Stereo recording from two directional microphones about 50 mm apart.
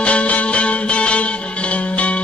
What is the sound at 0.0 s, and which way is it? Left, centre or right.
Music, left.